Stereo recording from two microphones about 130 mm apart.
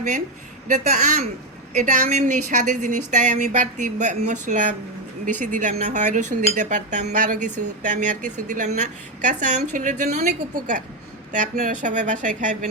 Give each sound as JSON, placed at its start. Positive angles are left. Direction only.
{"t": 0.7, "sound": "speech", "side_deg": -70}
{"t": 1.7, "sound": "speech", "side_deg": -80}